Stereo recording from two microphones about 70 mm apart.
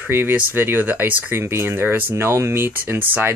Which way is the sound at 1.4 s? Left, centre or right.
Right.